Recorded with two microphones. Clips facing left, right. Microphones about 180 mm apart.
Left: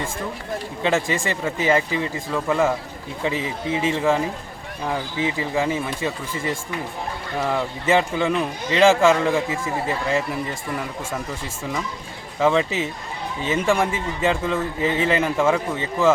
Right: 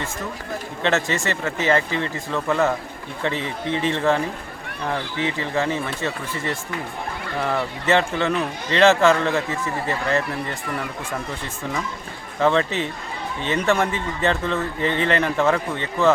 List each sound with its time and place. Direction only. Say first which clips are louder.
0.8 s speech: even; 10° left (ahead or behind)
12.4 s speech: even; 5° left (ahead or behind)